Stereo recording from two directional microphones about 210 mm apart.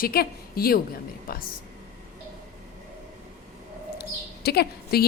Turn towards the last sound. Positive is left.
turn(degrees=50)  # may be behind; listen again after turning